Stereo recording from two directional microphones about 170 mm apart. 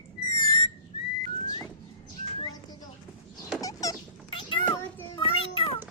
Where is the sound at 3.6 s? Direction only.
20° left (ahead or behind).